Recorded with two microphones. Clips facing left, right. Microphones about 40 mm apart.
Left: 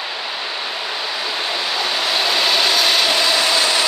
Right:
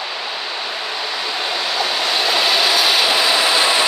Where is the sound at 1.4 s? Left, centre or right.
Centre.